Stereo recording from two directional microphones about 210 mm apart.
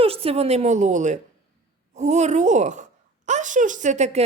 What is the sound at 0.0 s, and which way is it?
A child's voice, 25° right (ahead or behind).